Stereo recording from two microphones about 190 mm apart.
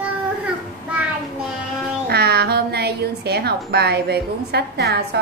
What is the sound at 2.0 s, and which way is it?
A woman's voice, 55° right (ahead or behind).